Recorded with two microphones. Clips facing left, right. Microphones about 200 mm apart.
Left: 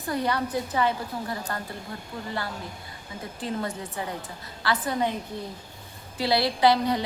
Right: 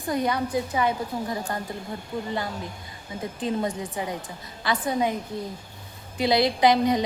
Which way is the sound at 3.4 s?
20° right (ahead or behind).